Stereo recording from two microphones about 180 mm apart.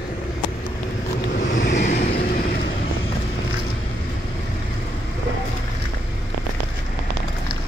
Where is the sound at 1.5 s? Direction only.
70° left (ahead or behind).